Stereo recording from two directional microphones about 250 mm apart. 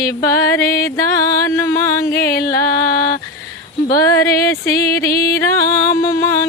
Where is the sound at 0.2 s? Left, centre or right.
Centre.